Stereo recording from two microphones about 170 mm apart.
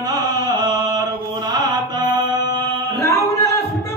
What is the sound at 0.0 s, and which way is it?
Chant, 25° right (ahead or behind).